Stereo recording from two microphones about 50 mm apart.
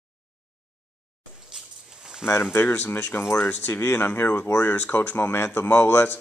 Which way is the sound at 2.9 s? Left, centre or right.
Left.